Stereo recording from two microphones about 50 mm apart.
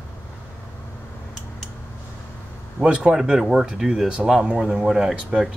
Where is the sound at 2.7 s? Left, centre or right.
Right.